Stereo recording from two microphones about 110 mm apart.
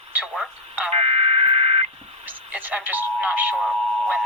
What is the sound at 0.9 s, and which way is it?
Radio, 65° right (ahead or behind).